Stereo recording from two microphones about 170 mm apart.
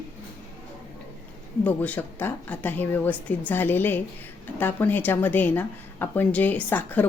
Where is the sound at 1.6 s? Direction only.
10° left (ahead or behind).